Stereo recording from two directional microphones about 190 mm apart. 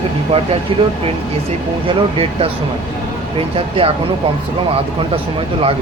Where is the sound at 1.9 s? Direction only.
30° right (ahead or behind).